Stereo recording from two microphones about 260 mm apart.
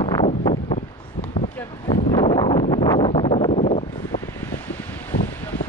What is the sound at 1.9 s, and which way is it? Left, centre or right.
Wind noise, centre.